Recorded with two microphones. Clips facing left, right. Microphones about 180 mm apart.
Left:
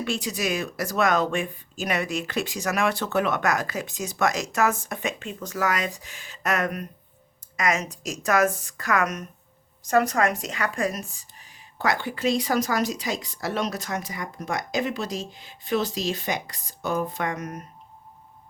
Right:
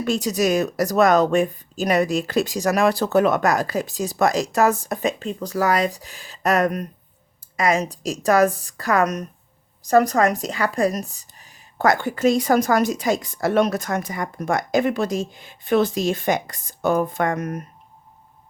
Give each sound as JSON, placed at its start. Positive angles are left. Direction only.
{"t": 0.0, "sound": "speech", "side_deg": -40}